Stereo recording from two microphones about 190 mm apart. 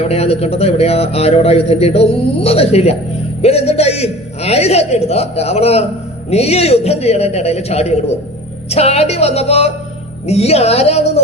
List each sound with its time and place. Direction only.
0.0 s a man's voice: 30° left (ahead or behind)